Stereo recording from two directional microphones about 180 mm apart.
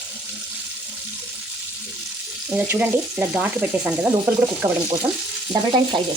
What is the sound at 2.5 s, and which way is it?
Speech, 10° right (ahead or behind).